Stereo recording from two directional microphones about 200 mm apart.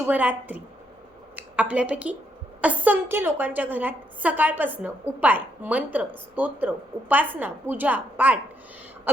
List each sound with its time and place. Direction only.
0.0 s a woman's voice: 10° right (ahead or behind)